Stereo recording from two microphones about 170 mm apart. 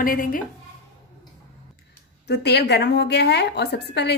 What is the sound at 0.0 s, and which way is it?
Speech, 55° left (ahead or behind).